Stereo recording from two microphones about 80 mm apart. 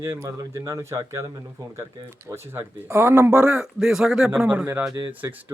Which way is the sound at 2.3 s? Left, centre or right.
Right.